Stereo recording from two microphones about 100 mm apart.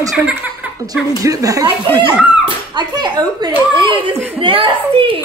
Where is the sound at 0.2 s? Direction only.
15° right (ahead or behind).